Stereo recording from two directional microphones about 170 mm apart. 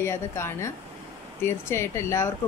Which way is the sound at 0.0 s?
15° left (ahead or behind).